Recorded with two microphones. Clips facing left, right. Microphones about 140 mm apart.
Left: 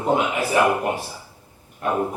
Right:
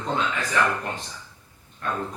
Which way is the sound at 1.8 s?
20° left (ahead or behind).